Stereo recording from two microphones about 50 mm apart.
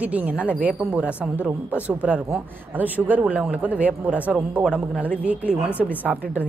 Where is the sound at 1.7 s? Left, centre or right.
Right.